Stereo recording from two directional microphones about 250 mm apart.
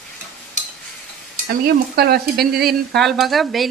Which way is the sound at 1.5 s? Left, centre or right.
Right.